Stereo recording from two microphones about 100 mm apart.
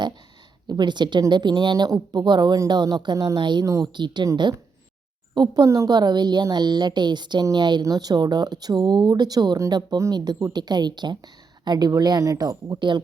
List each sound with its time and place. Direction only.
0.7 s a woman's voice: 50° right (ahead or behind)
5.3 s speech: 45° right (ahead or behind)
5.6 s a woman's voice: 35° right (ahead or behind)